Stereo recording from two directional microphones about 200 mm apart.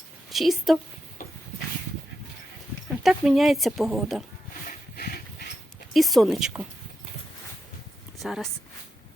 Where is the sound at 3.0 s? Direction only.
Centre (ahead or behind).